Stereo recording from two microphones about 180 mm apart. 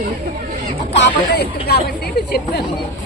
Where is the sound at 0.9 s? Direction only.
70° left (ahead or behind).